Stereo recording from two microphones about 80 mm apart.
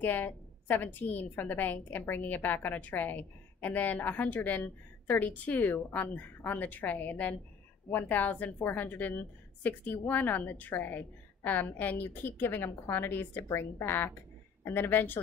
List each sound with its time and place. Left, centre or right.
0.0 s a woman's voice: left